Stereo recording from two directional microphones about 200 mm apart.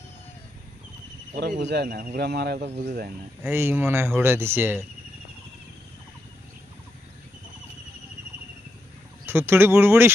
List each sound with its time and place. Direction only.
1.3 s speech: 50° right (ahead or behind)
3.4 s speech: 10° right (ahead or behind)
9.2 s speech: 10° right (ahead or behind)